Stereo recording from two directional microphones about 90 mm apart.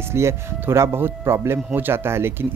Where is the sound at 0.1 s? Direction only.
30° right (ahead or behind).